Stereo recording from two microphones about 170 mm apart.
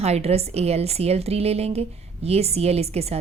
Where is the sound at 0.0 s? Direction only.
40° right (ahead or behind).